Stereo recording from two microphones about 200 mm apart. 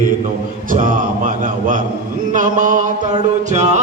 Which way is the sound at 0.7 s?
40° right (ahead or behind).